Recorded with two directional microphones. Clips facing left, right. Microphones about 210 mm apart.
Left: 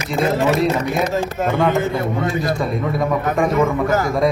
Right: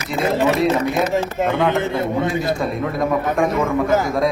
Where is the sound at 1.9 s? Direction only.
25° right (ahead or behind).